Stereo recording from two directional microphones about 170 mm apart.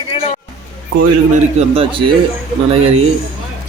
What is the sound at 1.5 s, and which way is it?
Speech, 35° right (ahead or behind).